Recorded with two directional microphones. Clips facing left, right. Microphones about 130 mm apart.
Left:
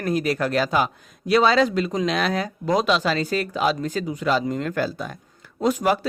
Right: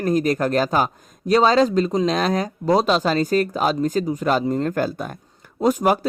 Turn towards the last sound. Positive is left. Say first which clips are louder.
# right 3 dB
turn(degrees=-40)  # may be behind; listen again after turning